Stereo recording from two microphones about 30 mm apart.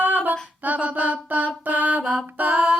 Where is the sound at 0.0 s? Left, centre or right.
Right.